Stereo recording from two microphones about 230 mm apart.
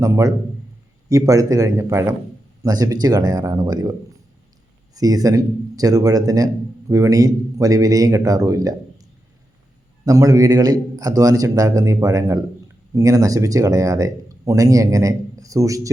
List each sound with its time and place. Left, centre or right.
0.0 s speech: centre
4.9 s speech: centre
10.1 s speech: centre